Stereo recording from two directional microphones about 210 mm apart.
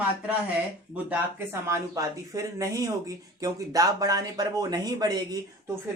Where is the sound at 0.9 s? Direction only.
10° right (ahead or behind).